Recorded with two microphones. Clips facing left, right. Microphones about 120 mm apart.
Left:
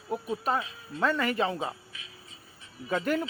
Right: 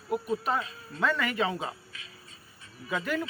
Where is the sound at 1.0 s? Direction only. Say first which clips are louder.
Left 1 dB; 35° left (ahead or behind).